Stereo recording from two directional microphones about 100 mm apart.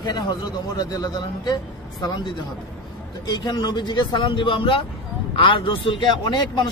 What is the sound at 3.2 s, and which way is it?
Speech, 45° left (ahead or behind).